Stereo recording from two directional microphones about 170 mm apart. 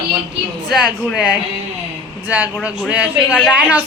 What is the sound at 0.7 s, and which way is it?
A woman's voice, centre (ahead or behind).